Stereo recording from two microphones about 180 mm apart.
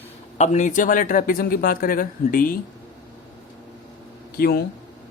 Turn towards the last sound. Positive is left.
turn(degrees=60)  # may be behind; listen again after turning